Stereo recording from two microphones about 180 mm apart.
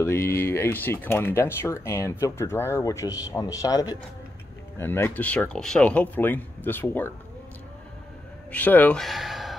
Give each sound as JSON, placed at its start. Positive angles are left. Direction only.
{"t": 0.0, "sound": "speech", "side_deg": 15}
{"t": 8.5, "sound": "speech", "side_deg": 10}